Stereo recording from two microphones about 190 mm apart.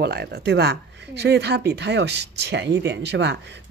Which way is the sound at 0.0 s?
60° right (ahead or behind).